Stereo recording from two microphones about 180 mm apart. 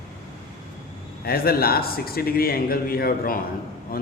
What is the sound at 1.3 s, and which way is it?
A man's voice, 60° left (ahead or behind).